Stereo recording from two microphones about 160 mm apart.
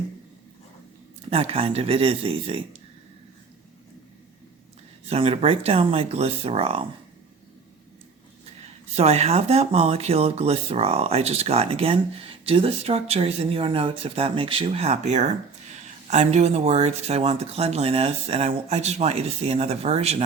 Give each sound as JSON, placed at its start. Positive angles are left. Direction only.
{"t": 1.3, "sound": "speech", "side_deg": -40}
{"t": 5.0, "sound": "speech", "side_deg": -35}
{"t": 8.6, "sound": "speech", "side_deg": -40}